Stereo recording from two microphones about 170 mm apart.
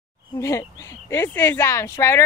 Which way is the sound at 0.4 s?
15° left (ahead or behind).